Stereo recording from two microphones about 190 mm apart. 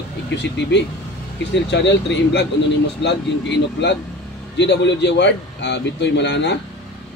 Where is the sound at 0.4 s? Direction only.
65° left (ahead or behind).